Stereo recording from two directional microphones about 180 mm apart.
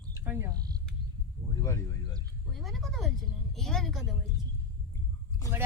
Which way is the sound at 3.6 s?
Centre (ahead or behind).